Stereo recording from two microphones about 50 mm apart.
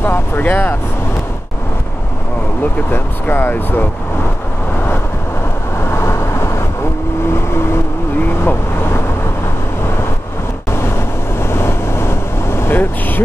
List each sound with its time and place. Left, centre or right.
0.0 s speech: left
2.9 s speech: left
5.8 s vehicle: left
11.3 s vehicle: left